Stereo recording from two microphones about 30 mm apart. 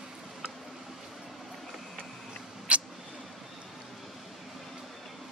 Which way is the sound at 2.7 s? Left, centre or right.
Right.